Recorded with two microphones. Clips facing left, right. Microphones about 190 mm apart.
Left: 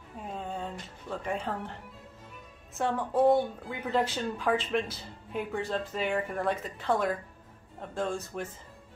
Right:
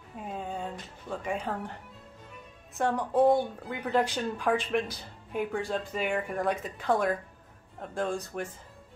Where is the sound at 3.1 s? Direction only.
Centre (ahead or behind).